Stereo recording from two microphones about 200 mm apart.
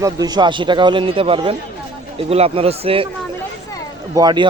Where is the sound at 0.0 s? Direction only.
20° right (ahead or behind).